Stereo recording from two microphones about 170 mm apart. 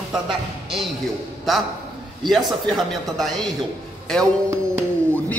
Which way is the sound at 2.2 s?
Centre (ahead or behind).